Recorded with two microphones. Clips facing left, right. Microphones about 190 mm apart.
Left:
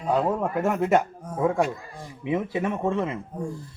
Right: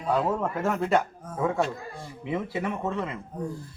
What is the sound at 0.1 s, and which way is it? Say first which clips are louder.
Speech: left 2 dB; 15° left (ahead or behind).